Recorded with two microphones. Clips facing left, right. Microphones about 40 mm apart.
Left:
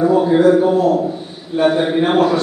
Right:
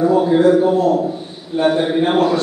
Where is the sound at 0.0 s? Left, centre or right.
Centre.